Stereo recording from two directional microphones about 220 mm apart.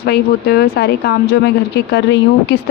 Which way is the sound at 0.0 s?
45° left (ahead or behind).